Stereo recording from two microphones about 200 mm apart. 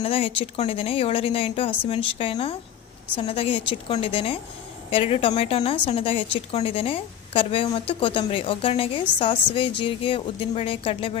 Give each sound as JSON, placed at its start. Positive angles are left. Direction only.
{"t": 0.0, "sound": "a woman's voice", "side_deg": 30}